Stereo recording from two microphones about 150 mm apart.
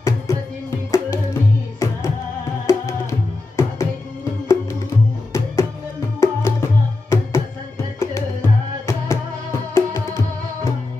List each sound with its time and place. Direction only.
0.0 s music: 20° left (ahead or behind)